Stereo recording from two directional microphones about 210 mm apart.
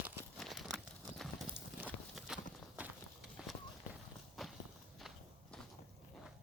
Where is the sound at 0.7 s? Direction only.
Centre (ahead or behind).